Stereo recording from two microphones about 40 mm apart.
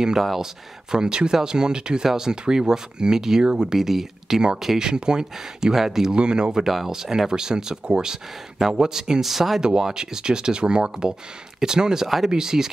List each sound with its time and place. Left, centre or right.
0.9 s speech: centre
4.8 s speech: centre
6.1 s speech: right
9.2 s speech: centre
9.6 s speech: centre